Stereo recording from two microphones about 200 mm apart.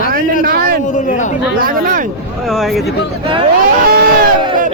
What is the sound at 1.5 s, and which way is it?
Speech, 45° right (ahead or behind).